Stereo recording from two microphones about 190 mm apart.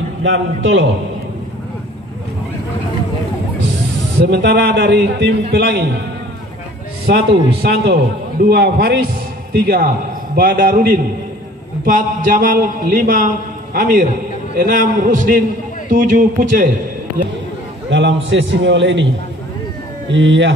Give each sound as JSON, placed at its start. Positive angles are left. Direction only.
{"t": 0.2, "sound": "a man's voice", "side_deg": -90}
{"t": 4.2, "sound": "a man's voice", "side_deg": -60}
{"t": 7.1, "sound": "a man's voice", "side_deg": -65}
{"t": 17.8, "sound": "a man's voice", "side_deg": -70}
{"t": 20.1, "sound": "a man's voice", "side_deg": -75}